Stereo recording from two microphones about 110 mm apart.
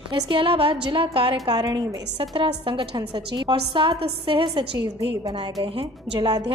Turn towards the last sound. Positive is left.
turn(degrees=-55)  # may be behind; listen again after turning